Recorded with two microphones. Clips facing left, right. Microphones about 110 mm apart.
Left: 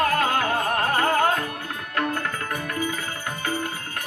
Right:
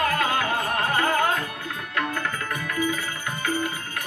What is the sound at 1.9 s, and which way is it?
Tabla, 45° left (ahead or behind).